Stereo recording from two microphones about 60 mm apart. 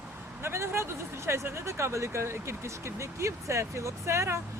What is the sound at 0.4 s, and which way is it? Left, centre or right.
Speech, right.